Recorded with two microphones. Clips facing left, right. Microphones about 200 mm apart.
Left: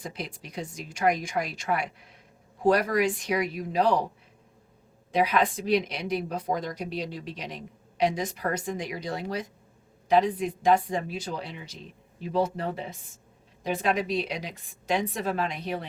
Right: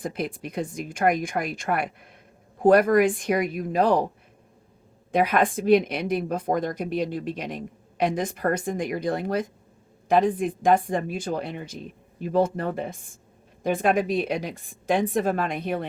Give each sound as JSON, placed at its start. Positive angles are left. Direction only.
{"t": 0.0, "sound": "speech", "side_deg": -55}
{"t": 5.1, "sound": "speech", "side_deg": -55}